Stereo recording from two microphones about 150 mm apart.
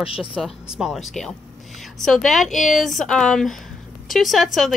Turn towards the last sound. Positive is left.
turn(degrees=0)  # may be behind; listen again after turning